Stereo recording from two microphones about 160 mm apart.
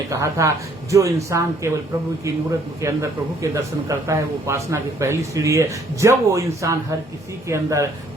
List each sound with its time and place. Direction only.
0.1 s a man's voice: 20° right (ahead or behind)